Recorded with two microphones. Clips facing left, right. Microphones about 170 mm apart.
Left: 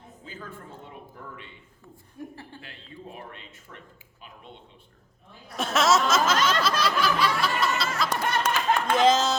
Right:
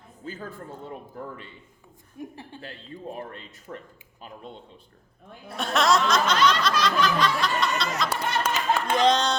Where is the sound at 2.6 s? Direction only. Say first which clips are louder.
Right 5 dB; 40° right (ahead or behind).